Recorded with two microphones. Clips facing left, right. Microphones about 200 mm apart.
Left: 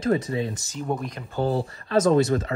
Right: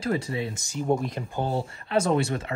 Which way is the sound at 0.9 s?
Centre (ahead or behind).